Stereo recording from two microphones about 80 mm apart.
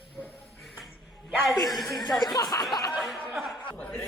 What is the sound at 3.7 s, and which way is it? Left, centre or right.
Speech, centre.